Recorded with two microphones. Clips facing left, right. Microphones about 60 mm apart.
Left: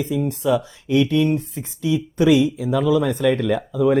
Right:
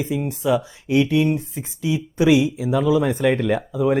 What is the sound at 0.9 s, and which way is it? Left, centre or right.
Speech, centre.